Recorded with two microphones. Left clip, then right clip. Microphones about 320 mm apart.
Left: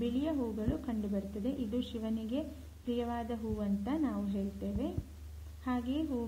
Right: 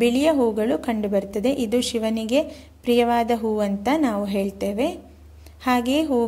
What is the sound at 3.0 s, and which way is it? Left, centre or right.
A woman's voice, right.